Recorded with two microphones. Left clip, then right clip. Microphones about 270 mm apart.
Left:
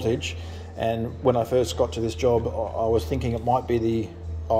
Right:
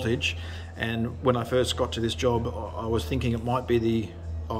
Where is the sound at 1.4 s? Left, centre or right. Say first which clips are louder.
Left 3 dB; right.